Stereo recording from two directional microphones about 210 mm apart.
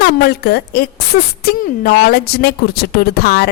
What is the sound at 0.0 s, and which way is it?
A woman's voice, 50° left (ahead or behind).